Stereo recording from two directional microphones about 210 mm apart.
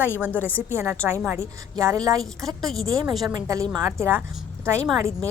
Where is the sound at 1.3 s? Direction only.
15° right (ahead or behind).